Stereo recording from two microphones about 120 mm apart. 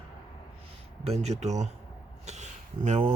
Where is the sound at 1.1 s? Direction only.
65° right (ahead or behind).